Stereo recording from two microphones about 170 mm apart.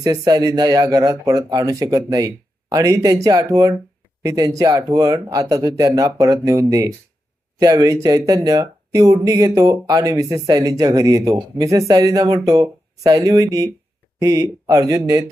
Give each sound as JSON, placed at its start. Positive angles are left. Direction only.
{"t": 0.0, "sound": "speech", "side_deg": -20}